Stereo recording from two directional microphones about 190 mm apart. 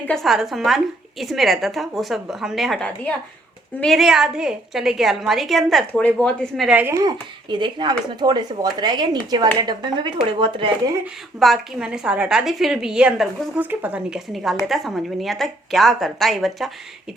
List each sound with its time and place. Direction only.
0.1 s a woman's voice: centre (ahead or behind); by 11.0 s 25° right (ahead or behind)
11.3 s a woman's voice: centre (ahead or behind)